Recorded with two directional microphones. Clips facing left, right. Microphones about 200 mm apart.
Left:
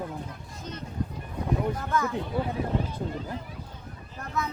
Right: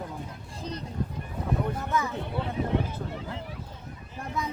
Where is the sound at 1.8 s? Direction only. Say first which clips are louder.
Left 1 dB; 15° right (ahead or behind).